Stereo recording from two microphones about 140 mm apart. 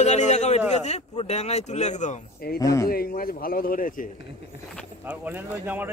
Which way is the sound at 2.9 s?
90° left.